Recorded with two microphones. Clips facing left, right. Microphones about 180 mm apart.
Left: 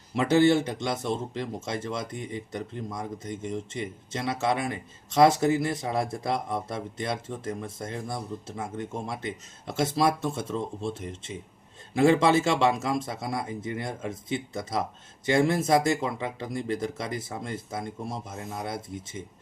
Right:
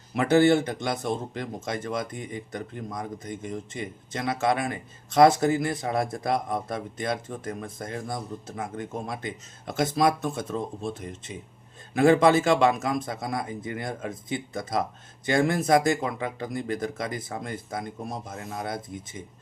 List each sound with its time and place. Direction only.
0.1 s speech: 20° left (ahead or behind)